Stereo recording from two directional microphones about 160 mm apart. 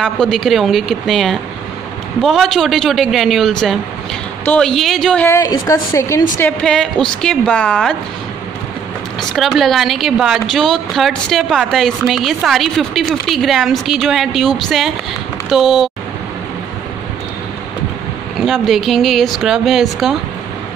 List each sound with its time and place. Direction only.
0.0 s a woman's voice: centre (ahead or behind)
5.3 s a woman's voice: 20° left (ahead or behind)
6.6 s a woman's voice: 5° left (ahead or behind)
9.2 s a woman's voice: centre (ahead or behind)
18.4 s a woman's voice: centre (ahead or behind)